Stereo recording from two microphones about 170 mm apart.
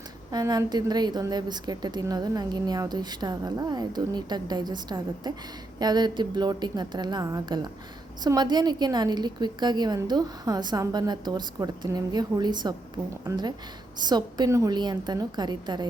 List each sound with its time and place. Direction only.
0.3 s a woman's voice: 25° right (ahead or behind)